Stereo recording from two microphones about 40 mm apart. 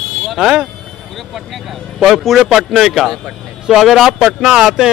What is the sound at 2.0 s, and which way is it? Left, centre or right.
A man's voice, centre.